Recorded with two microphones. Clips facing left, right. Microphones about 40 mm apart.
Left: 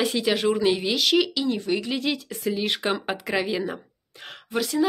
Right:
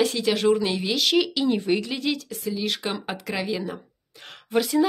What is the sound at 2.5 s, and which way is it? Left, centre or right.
A woman's voice, left.